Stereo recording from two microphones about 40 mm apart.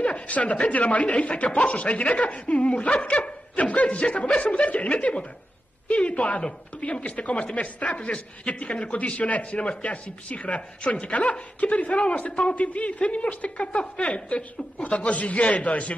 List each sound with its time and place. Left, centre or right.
0.0 s a man's voice: left